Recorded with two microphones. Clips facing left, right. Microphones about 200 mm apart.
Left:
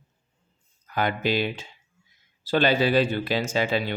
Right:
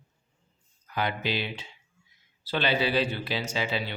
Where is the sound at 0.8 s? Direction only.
45° left (ahead or behind).